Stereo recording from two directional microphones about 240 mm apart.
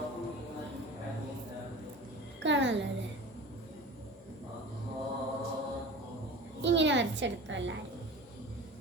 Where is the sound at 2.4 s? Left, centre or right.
Right.